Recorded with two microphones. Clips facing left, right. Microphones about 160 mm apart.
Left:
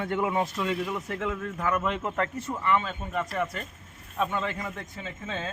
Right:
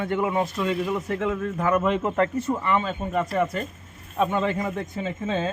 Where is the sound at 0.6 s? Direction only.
20° right (ahead or behind).